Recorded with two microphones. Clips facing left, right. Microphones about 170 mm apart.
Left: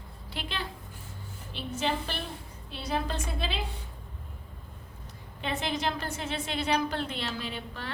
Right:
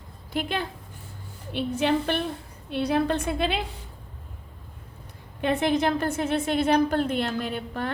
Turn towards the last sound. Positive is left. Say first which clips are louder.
# right 8 dB
turn(degrees=-50)  # may be behind; listen again after turning